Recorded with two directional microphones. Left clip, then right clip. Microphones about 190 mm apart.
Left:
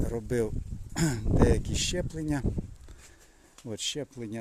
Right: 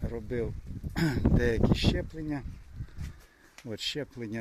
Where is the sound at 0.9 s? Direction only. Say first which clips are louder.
Left 1 dB; 10° left (ahead or behind).